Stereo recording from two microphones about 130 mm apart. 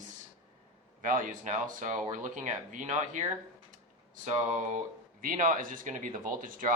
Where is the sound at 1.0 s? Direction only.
90° right.